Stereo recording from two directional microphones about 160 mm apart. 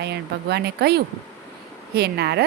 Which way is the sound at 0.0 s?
90° right.